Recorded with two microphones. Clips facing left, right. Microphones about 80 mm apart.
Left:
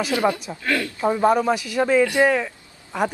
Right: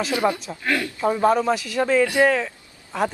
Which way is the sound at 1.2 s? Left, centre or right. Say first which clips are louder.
Left 1 dB; centre.